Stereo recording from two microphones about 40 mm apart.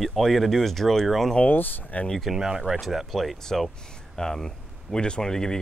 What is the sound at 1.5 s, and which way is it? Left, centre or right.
Speech, left.